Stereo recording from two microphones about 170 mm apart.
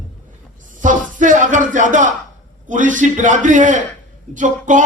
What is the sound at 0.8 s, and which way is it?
Music, 50° right (ahead or behind).